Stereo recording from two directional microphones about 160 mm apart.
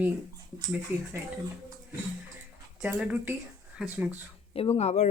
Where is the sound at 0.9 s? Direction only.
10° right (ahead or behind).